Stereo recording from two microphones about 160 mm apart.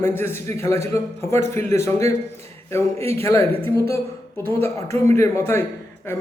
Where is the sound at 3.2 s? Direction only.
20° left (ahead or behind).